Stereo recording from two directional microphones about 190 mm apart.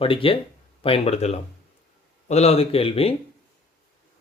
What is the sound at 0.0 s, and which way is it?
Speech, 30° left (ahead or behind).